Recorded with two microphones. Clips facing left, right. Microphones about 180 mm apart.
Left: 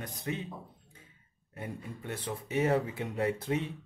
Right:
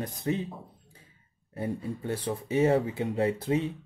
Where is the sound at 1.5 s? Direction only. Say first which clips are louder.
Right 8 dB; 30° right (ahead or behind).